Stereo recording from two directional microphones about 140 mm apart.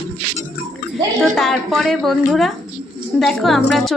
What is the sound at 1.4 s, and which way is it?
Speech, centre (ahead or behind).